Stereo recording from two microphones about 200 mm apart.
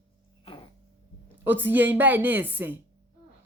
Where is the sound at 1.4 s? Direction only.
10° right (ahead or behind).